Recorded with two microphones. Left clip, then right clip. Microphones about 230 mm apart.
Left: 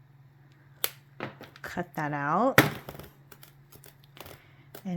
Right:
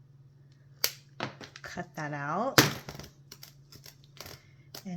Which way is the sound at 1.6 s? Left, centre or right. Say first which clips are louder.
Left 5 dB; left.